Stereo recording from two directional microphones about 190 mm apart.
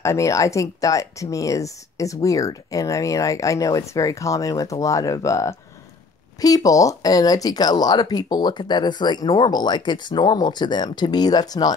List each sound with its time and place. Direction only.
0.0 s speech: 15° left (ahead or behind)